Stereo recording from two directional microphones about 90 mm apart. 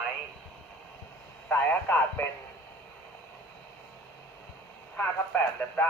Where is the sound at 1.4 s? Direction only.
20° left (ahead or behind).